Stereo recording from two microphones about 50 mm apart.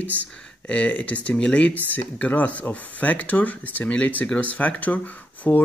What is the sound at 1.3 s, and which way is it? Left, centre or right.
Speech, centre.